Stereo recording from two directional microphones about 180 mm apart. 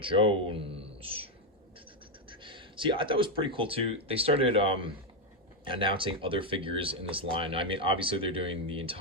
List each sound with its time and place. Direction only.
0.0 s speech: 30° right (ahead or behind)
2.3 s speech: 30° right (ahead or behind)